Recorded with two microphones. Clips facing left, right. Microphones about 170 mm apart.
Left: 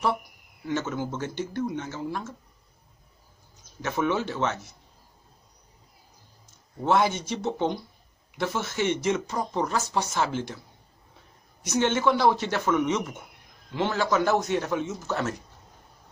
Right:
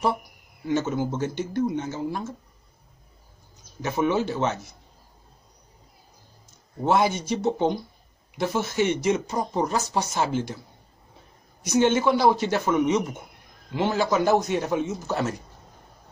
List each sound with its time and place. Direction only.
0.7 s speech: 15° right (ahead or behind)
3.8 s speech: 15° right (ahead or behind)
6.8 s speech: 15° right (ahead or behind)
11.7 s speech: 15° right (ahead or behind)